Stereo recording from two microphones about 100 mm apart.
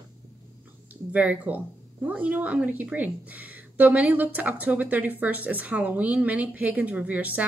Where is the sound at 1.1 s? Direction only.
15° right (ahead or behind).